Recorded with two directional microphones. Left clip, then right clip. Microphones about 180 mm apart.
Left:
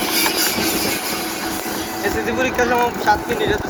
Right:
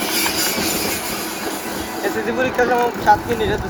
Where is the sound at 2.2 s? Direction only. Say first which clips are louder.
Right 1 dB; 45° right (ahead or behind).